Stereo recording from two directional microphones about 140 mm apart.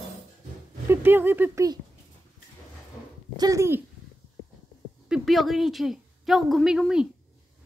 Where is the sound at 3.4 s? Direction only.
20° right (ahead or behind).